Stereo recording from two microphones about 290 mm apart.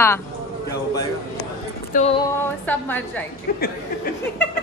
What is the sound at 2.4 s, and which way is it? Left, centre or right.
Speech, centre.